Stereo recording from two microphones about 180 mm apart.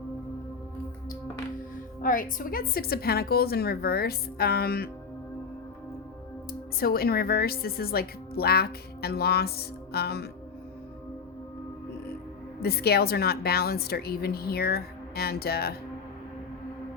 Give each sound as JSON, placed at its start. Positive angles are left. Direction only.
{"t": 2.0, "sound": "a woman's voice", "side_deg": 50}
{"t": 6.5, "sound": "speech", "side_deg": 55}
{"t": 12.5, "sound": "a woman's voice", "side_deg": 60}